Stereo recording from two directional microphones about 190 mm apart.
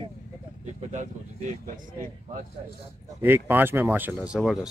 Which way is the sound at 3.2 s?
10° right (ahead or behind).